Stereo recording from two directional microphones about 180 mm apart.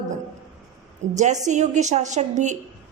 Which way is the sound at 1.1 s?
40° right (ahead or behind).